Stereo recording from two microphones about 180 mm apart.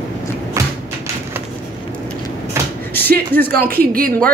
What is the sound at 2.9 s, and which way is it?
Speech, 10° left (ahead or behind).